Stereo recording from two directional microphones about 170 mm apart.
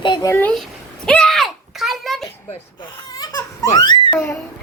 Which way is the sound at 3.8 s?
25° left (ahead or behind).